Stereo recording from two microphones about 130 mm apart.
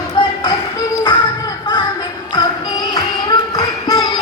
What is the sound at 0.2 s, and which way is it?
Music, 35° left (ahead or behind).